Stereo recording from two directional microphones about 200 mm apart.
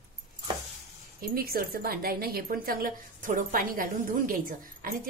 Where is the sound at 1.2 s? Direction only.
45° right (ahead or behind).